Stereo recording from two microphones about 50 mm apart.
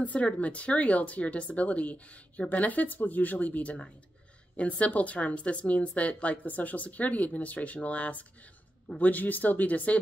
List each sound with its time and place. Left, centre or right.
0.0 s speech: left